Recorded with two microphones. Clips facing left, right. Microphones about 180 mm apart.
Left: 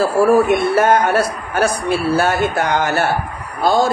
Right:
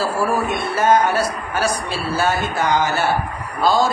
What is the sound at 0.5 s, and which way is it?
A man's voice, 60° left (ahead or behind).